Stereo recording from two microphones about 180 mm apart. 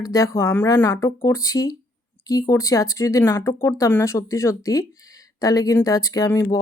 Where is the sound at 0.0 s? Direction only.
20° left (ahead or behind).